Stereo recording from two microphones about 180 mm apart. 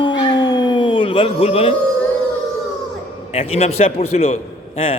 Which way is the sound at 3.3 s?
35° left (ahead or behind).